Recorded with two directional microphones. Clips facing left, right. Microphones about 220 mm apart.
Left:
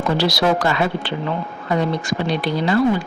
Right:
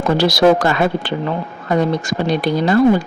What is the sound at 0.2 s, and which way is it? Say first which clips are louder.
A woman's voice: right 8 dB; 45° right (ahead or behind).